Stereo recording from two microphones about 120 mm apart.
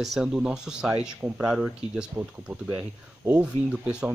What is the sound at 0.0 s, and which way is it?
Speech, 5° right (ahead or behind).